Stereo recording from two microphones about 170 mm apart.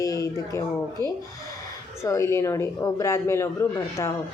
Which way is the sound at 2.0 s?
15° left (ahead or behind).